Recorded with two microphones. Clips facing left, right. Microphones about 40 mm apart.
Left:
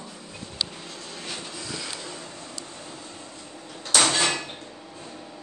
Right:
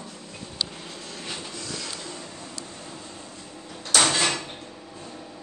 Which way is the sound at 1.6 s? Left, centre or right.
Centre.